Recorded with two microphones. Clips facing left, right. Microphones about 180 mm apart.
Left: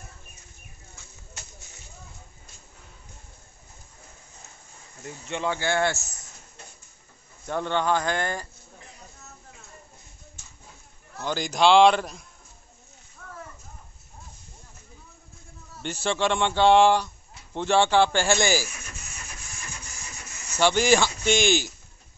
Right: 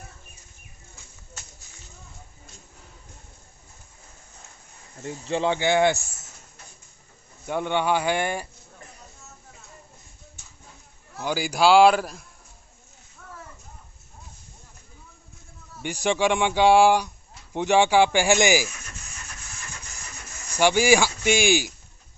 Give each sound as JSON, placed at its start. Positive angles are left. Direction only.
{"t": 5.0, "sound": "speech", "side_deg": -30}
{"t": 7.4, "sound": "speech", "side_deg": -10}
{"t": 11.1, "sound": "a man's voice", "side_deg": -10}
{"t": 15.8, "sound": "speech", "side_deg": -15}
{"t": 20.5, "sound": "speech", "side_deg": -10}